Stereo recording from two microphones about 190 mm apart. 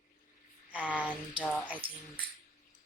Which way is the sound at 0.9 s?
5° left (ahead or behind).